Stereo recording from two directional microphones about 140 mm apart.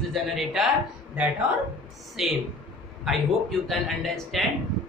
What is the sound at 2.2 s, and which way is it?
A woman's voice, centre (ahead or behind).